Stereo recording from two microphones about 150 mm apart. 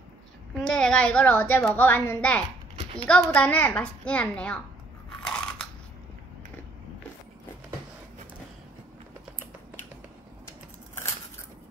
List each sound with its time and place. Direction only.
0.6 s a child's voice: 5° left (ahead or behind)
5.2 s biting: 5° left (ahead or behind)